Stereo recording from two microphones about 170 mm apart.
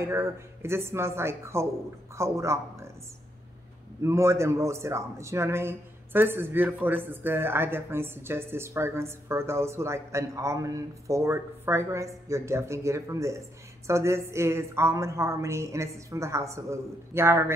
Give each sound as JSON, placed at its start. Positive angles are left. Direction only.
{"t": 0.0, "sound": "a man's voice", "side_deg": -15}
{"t": 4.0, "sound": "a man's voice", "side_deg": -15}